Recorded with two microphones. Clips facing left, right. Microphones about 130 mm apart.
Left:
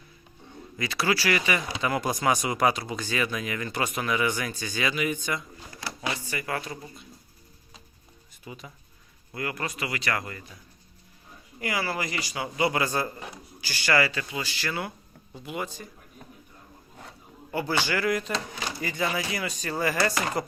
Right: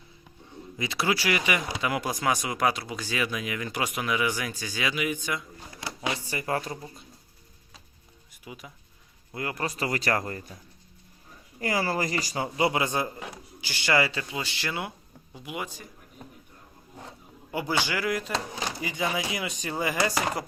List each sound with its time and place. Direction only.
0.8 s speech: 20° right (ahead or behind)
5.8 s drawer open or close: 20° right (ahead or behind)
6.2 s speech: 30° right (ahead or behind)
8.3 s a sound: 10° right (ahead or behind)
9.3 s speech: 25° right (ahead or behind)
11.6 s speech: 40° right (ahead or behind)
12.5 s a man's voice: 25° right (ahead or behind)
17.1 s speech: 15° right (ahead or behind)